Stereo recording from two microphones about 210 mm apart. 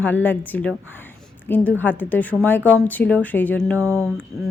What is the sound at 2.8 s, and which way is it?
Speech, 10° left (ahead or behind).